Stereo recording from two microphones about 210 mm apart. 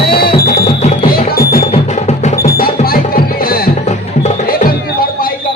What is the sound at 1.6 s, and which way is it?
Music, 30° left (ahead or behind).